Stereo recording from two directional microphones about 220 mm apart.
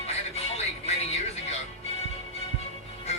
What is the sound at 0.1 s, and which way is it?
Music, 30° left (ahead or behind).